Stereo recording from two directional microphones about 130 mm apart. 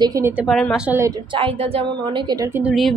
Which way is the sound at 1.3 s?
45° right (ahead or behind).